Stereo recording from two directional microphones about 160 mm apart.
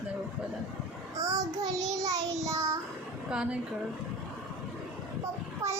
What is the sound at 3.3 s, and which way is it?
Speech, 5° right (ahead or behind).